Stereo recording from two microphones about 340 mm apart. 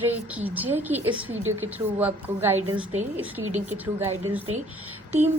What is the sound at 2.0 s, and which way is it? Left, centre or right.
Speech, centre.